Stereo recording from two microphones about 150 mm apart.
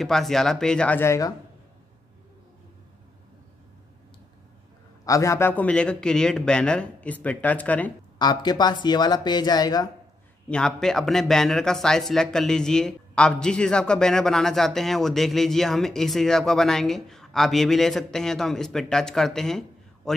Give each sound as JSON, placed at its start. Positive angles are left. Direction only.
{"t": 0.0, "sound": "speech", "side_deg": 0}
{"t": 5.0, "sound": "a man's voice", "side_deg": 20}
{"t": 8.2, "sound": "speech", "side_deg": 30}
{"t": 10.5, "sound": "a man's voice", "side_deg": 5}